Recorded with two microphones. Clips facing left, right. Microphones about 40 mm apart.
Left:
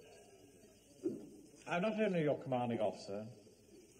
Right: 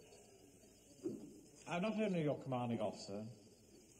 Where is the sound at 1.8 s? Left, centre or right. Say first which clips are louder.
Left 4 dB; centre.